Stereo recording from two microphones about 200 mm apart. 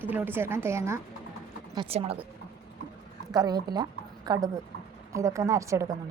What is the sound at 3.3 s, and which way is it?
A woman's voice, 20° right (ahead or behind).